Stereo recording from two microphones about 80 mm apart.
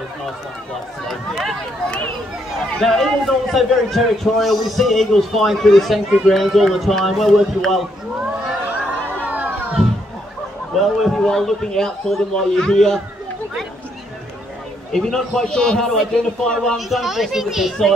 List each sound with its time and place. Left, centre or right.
1.0 s a sound: centre
2.8 s a man's voice: centre
9.3 s chatter: right
10.8 s a man's voice: centre
14.9 s a man's voice: centre